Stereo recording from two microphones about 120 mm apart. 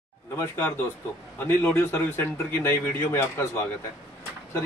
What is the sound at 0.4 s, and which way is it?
A man's voice, 20° left (ahead or behind).